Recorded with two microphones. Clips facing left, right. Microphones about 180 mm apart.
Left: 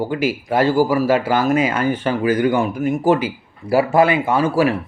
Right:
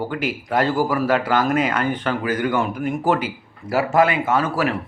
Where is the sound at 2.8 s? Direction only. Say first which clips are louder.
Left 4 dB; 25° left (ahead or behind).